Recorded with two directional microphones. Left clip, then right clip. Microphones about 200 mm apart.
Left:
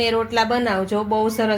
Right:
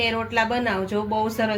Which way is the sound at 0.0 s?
35° left (ahead or behind).